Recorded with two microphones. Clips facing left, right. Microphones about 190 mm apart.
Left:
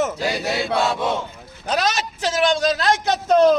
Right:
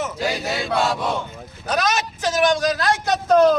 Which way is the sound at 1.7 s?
30° left (ahead or behind).